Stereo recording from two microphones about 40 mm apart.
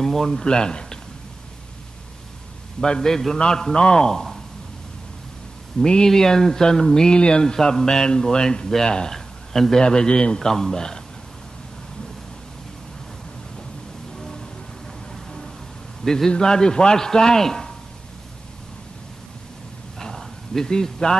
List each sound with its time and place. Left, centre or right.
0.0 s speech: centre
2.8 s speech: centre
6.0 s speech: centre
10.4 s speech: centre
16.0 s a man's voice: centre
16.3 s speech: centre
20.0 s a sound: centre